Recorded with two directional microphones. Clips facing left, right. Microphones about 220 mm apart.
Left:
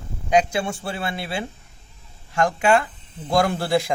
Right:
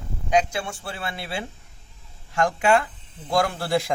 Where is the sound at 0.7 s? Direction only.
20° left (ahead or behind).